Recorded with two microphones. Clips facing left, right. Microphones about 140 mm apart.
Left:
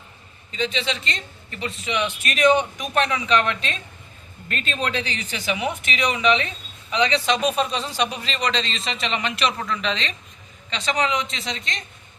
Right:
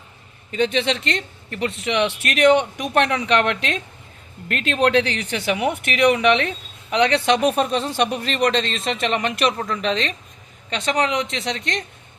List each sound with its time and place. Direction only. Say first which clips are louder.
0.5 s a man's voice: right 6 dB; 60° right (ahead or behind)